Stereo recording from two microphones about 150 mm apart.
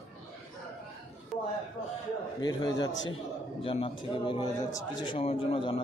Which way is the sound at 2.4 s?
25° left (ahead or behind).